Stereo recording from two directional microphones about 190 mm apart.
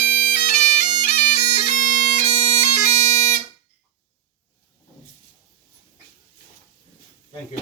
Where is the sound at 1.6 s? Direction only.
40° left (ahead or behind).